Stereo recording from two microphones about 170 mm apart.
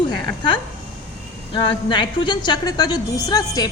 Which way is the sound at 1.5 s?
25° left (ahead or behind).